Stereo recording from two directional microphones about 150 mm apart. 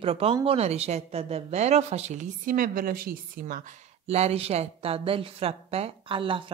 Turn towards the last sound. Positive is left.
turn(degrees=-35)  # may be behind; listen again after turning